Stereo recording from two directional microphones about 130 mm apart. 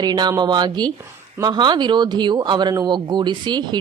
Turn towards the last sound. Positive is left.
turn(degrees=-35)  # may be behind; listen again after turning